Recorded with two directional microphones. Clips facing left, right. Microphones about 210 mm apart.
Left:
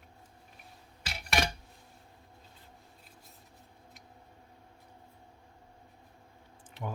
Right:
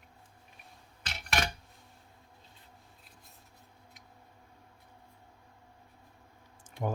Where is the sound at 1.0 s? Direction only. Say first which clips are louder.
Left 2 dB; centre (ahead or behind).